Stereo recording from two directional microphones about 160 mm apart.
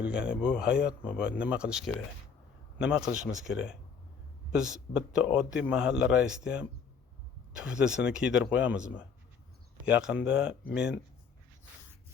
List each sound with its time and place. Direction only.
0.0 s a man's voice: 5° right (ahead or behind)
4.5 s a man's voice: 5° right (ahead or behind)
9.9 s a man's voice: 5° right (ahead or behind)